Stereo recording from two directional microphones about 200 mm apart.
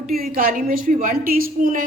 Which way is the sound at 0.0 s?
45° right (ahead or behind).